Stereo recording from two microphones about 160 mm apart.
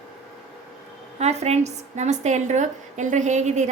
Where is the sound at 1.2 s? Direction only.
45° right (ahead or behind).